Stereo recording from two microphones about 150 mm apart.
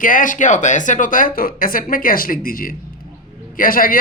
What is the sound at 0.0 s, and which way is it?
A man's voice, 65° left (ahead or behind).